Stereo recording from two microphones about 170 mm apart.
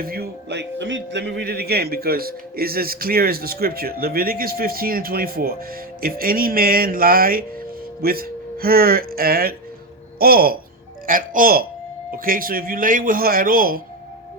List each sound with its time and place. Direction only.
0.0 s speech: 65° right (ahead or behind); by 1.2 s 90° right
1.4 s a man's voice: 65° right (ahead or behind)